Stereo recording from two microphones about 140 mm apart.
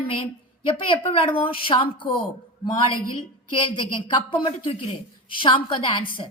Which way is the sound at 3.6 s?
35° left (ahead or behind).